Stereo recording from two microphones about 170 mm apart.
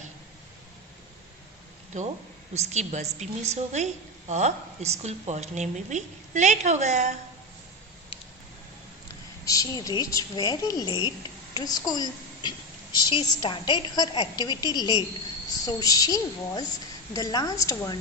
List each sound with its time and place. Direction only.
1.9 s a woman's voice: 45° right (ahead or behind)
9.4 s speech: 20° left (ahead or behind)